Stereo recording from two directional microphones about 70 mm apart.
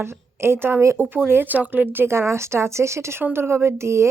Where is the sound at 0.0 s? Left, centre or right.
Right.